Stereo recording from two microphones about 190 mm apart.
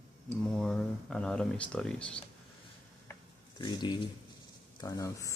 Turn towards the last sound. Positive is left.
turn(degrees=15)  # may be behind; listen again after turning